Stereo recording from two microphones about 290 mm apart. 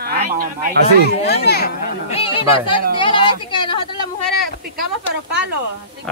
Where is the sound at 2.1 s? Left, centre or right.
Centre.